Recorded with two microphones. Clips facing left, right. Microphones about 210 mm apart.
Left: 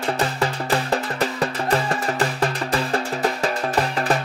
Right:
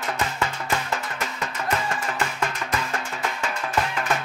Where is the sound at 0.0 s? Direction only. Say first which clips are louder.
Left 5 dB; 35° left (ahead or behind).